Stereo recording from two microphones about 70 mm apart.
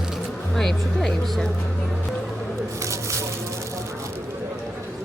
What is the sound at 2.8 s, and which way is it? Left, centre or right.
Squish, right.